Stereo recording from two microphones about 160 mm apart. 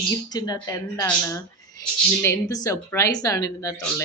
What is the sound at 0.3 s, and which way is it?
Speech, 25° left (ahead or behind).